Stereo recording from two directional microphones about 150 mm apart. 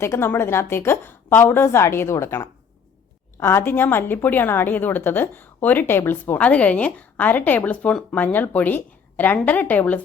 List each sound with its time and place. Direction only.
0.0 s a woman's voice: 15° left (ahead or behind)